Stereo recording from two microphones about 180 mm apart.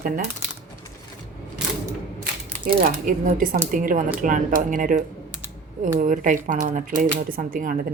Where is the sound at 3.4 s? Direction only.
50° right (ahead or behind).